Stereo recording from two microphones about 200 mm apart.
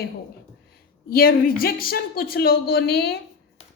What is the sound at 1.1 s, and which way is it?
A woman's voice, 50° left (ahead or behind).